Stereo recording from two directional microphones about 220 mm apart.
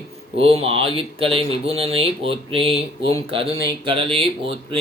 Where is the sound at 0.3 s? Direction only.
25° right (ahead or behind).